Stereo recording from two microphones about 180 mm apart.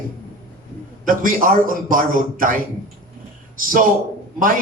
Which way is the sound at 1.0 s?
50° right (ahead or behind).